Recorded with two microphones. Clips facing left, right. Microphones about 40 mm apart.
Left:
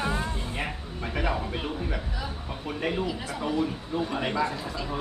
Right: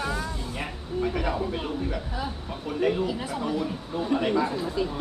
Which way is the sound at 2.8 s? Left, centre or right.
Centre.